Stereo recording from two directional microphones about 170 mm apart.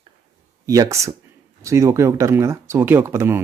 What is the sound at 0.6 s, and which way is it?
Speech, 20° right (ahead or behind).